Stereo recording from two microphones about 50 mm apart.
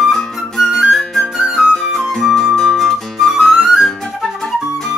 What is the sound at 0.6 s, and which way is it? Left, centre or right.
Music, centre.